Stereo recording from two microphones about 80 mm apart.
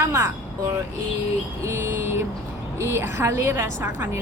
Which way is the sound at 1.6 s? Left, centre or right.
Right.